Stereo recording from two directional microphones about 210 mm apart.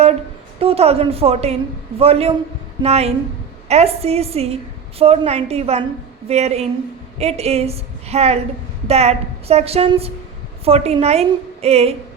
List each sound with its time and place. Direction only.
0.6 s a woman's voice: 30° right (ahead or behind)